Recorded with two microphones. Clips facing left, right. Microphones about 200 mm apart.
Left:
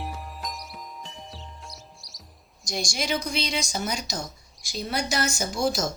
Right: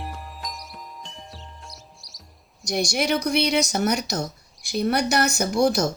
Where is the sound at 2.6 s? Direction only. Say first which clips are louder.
Right 6 dB; 60° right (ahead or behind).